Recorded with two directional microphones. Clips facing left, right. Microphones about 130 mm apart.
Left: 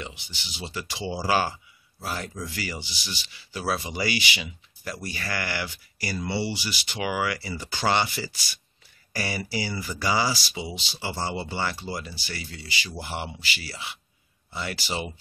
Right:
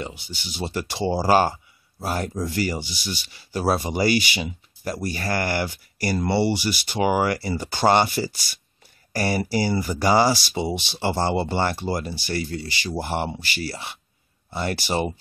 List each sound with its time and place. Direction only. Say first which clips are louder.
0.0 s speech: right 6 dB; 45° right (ahead or behind)